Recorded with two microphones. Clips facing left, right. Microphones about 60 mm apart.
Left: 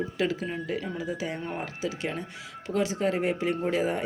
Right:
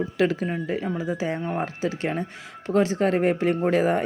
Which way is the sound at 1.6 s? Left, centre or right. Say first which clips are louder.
Right 5 dB; right.